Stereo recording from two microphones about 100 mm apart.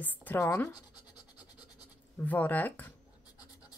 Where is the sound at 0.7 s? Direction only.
45° left (ahead or behind).